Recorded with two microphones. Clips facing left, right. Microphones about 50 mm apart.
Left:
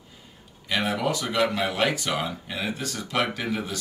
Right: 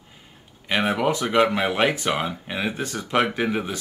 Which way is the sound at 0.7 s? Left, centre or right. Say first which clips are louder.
Right 4 dB; right.